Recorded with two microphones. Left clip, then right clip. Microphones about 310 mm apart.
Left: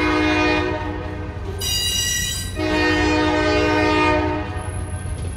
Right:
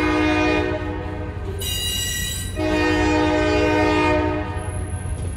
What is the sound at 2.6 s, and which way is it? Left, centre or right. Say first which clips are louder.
Train: left 1 dB; left.